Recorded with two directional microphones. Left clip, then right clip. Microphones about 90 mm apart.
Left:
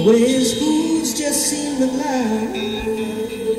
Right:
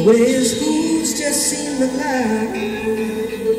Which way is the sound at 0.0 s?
30° left (ahead or behind).